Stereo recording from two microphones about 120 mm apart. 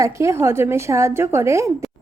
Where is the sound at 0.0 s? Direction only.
25° right (ahead or behind).